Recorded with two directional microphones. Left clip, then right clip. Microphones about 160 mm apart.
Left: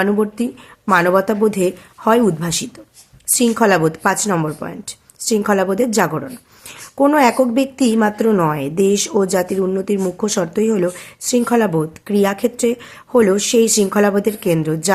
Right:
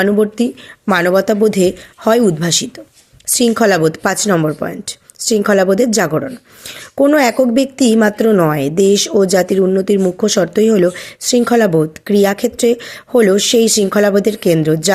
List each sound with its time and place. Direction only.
0.0 s a woman's voice: 25° right (ahead or behind)